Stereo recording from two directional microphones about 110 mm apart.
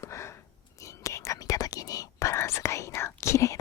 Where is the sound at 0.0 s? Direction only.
25° left (ahead or behind).